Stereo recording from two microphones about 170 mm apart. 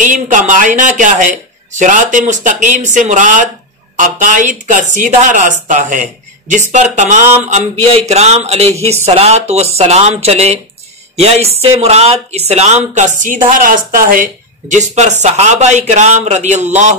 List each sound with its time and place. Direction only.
0.0 s speech: 50° right (ahead or behind)